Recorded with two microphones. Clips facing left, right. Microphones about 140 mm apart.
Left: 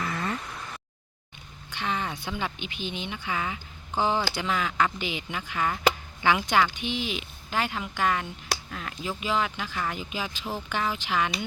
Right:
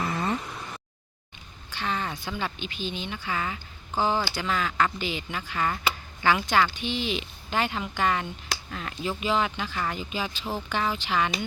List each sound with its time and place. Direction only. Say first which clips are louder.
0.0 s a sound: right 3 dB; 25° right (ahead or behind)
1.8 s a woman's voice: even; 15° left (ahead or behind)
4.0 s a woman's voice: even; 20° left (ahead or behind)